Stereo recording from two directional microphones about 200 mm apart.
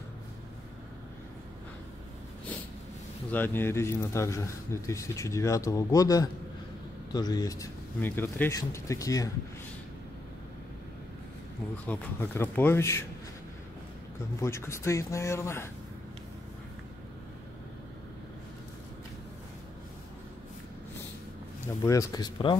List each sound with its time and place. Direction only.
3.3 s speech: 10° left (ahead or behind)
11.9 s speech: 10° left (ahead or behind)
14.4 s speech: 15° left (ahead or behind)
21.8 s speech: 15° left (ahead or behind)